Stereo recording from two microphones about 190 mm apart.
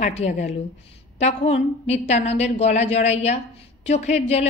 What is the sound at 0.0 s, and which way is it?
A woman's voice, 35° left (ahead or behind).